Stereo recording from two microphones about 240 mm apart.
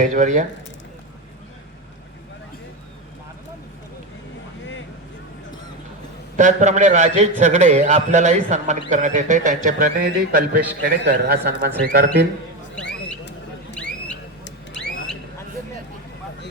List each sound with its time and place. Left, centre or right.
0.0 s a man's voice: right
6.3 s a man's voice: right
14.4 s a sound: left